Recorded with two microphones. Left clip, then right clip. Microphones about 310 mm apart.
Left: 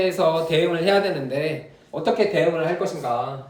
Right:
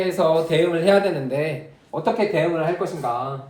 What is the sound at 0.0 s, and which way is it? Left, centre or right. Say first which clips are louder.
Speech: right 1 dB; centre.